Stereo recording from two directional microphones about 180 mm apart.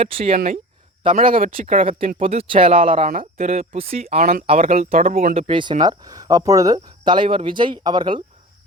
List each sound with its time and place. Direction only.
0.0 s speech: 30° right (ahead or behind)
4.2 s speech: 50° right (ahead or behind)
4.4 s speech: 35° right (ahead or behind)
4.9 s speech: 50° right (ahead or behind)
5.3 s speech: 30° right (ahead or behind)